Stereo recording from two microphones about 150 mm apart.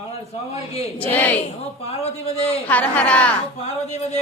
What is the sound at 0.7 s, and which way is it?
Speech, 40° left (ahead or behind).